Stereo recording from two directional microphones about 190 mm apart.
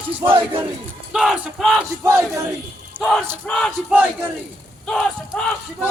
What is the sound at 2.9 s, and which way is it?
Speech, 10° right (ahead or behind).